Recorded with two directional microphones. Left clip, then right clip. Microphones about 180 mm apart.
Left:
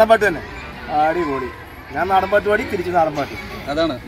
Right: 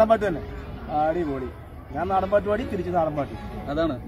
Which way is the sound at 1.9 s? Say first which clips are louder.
Left 6 dB; 5° left (ahead or behind).